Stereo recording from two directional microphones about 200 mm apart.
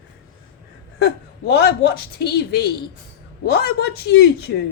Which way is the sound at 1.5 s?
55° left (ahead or behind).